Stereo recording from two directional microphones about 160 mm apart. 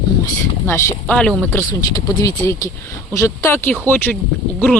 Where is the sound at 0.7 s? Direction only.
15° left (ahead or behind).